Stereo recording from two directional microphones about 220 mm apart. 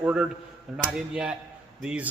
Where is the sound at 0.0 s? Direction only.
5° right (ahead or behind).